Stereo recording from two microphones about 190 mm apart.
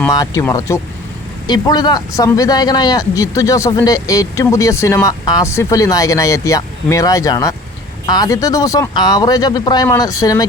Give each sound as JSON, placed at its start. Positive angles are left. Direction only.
{"t": 0.0, "sound": "a man's voice", "side_deg": 15}